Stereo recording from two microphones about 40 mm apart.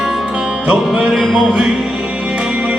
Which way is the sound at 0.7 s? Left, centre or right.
Right.